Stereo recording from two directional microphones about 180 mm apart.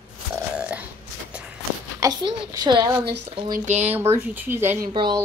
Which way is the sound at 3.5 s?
40° right (ahead or behind).